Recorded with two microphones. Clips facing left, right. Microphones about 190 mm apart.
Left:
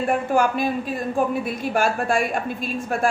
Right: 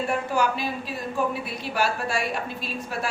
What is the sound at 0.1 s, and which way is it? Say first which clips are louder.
Speech: left 6 dB; 50° left (ahead or behind).